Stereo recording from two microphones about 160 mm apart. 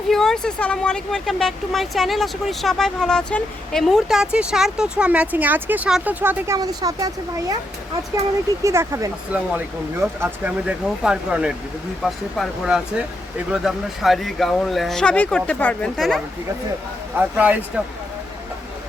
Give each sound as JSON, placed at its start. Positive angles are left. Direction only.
{"t": 0.1, "sound": "speech", "side_deg": 5}
{"t": 6.6, "sound": "speech", "side_deg": -25}
{"t": 8.6, "sound": "speech", "side_deg": -15}
{"t": 17.2, "sound": "speech", "side_deg": -10}